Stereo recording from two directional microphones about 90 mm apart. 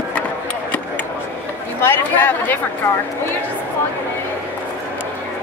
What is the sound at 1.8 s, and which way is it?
Speech, 25° left (ahead or behind).